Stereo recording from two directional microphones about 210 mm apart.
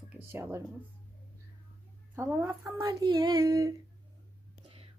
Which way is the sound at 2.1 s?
15° right (ahead or behind).